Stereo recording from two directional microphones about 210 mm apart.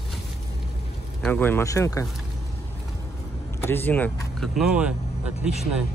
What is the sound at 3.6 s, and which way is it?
Speech, 10° left (ahead or behind).